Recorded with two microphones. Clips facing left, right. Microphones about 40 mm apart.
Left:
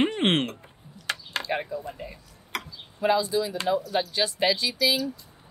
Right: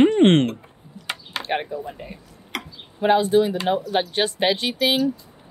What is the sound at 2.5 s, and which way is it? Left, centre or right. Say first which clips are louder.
Speech: right 3 dB; right.